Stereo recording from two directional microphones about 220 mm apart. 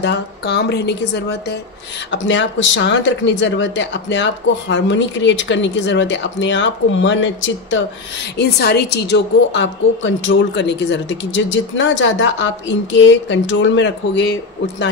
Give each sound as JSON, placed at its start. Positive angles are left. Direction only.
{"t": 0.0, "sound": "a woman's voice", "side_deg": 50}
{"t": 8.4, "sound": "a woman's voice", "side_deg": 50}